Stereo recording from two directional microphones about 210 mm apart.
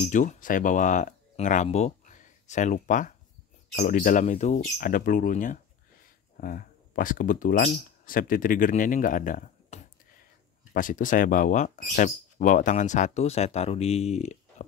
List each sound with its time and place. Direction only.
0.0 s speech: 35° left (ahead or behind)